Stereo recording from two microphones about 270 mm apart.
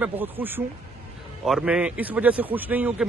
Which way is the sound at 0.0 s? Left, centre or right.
Centre.